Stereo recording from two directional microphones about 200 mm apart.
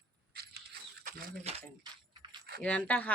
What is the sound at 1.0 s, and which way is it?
Speech, 35° right (ahead or behind).